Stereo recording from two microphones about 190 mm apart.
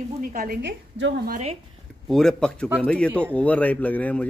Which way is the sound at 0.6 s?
65° right (ahead or behind).